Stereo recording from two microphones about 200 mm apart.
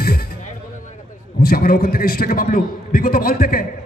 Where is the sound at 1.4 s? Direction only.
45° left (ahead or behind).